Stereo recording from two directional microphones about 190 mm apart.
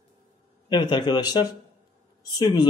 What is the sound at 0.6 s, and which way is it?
Speech, 25° left (ahead or behind).